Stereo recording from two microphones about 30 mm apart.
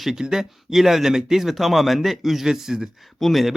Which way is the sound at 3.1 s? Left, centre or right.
Centre.